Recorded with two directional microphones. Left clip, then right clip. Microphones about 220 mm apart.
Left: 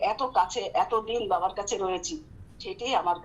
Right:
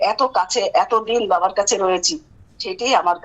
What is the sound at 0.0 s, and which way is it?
A man's voice, 50° right (ahead or behind).